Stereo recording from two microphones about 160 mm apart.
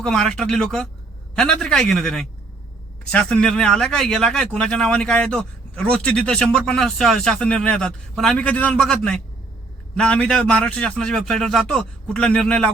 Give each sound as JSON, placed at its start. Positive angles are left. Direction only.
{"t": 0.0, "sound": "speech", "side_deg": 5}